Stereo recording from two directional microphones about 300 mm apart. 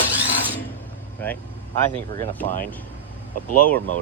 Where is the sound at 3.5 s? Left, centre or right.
Left.